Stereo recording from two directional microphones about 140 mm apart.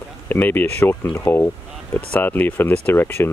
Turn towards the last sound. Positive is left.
turn(degrees=15)  # may be behind; listen again after turning